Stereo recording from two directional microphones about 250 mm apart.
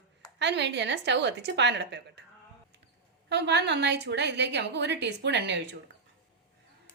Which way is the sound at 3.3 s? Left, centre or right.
Right.